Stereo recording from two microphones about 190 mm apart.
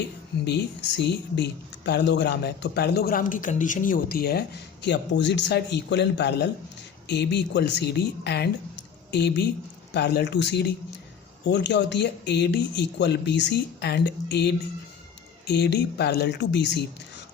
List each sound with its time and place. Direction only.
0.4 s speech: 65° left (ahead or behind)